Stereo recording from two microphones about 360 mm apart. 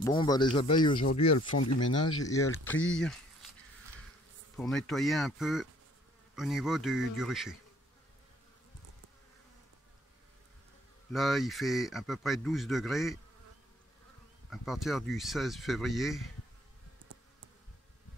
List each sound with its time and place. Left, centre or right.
0.0 s speech: centre
1.3 s speech: left
2.0 s speech: centre
4.6 s speech: centre
11.1 s speech: centre
14.5 s speech: centre